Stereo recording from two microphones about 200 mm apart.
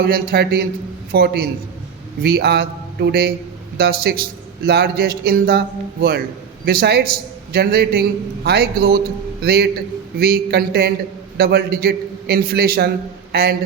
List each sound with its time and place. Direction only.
0.0 s a man's voice: 50° right (ahead or behind)